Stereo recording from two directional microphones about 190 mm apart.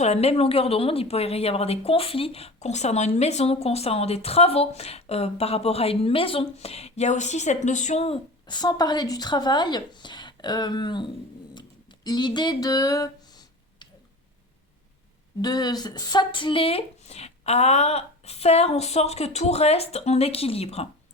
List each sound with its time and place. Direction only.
0.0 s speech: 35° left (ahead or behind)
12.0 s a sound: 20° left (ahead or behind)
15.4 s speech: 20° left (ahead or behind)